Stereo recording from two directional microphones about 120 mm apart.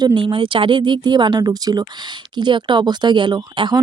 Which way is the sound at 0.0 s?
40° right (ahead or behind).